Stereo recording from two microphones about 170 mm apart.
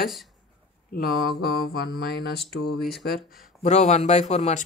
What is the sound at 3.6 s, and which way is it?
Speech, 40° left (ahead or behind).